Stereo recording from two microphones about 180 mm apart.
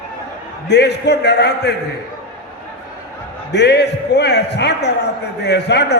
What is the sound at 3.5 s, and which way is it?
Speech, 70° left (ahead or behind).